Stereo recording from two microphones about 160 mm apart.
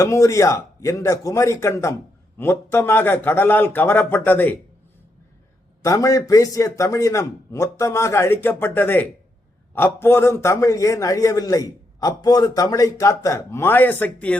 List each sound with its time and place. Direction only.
0.0 s a man's voice: 20° left (ahead or behind)
5.8 s a man's voice: 20° left (ahead or behind)